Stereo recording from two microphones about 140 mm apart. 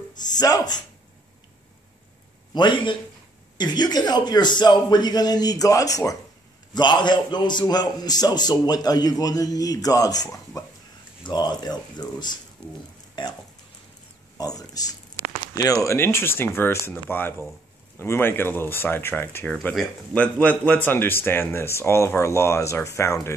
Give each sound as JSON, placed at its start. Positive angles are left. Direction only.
{"t": 0.2, "sound": "a man's voice", "side_deg": 30}
{"t": 2.5, "sound": "a man's voice", "side_deg": 35}
{"t": 14.4, "sound": "a man's voice", "side_deg": 25}